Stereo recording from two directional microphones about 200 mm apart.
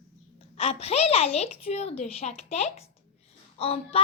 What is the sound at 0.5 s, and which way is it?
A woman's voice, 30° left (ahead or behind).